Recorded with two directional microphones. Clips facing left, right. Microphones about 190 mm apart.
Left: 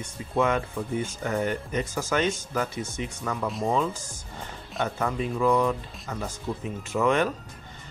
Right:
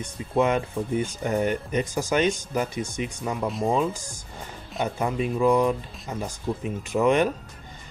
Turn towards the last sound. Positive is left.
turn(degrees=-15)  # may be behind; listen again after turning